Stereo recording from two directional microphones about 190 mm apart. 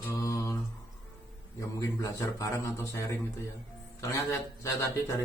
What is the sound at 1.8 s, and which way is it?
Speech, 15° left (ahead or behind).